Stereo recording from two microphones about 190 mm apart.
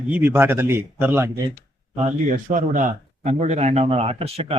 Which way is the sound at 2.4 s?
45° right (ahead or behind).